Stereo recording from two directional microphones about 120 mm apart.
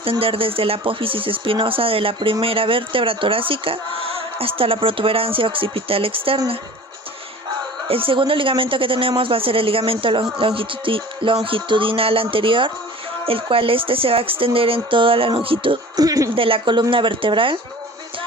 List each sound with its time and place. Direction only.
0.0 s speech: 50° right (ahead or behind)
7.9 s speech: 50° right (ahead or behind)
16.0 s speech: 30° right (ahead or behind)
16.3 s speech: 50° right (ahead or behind)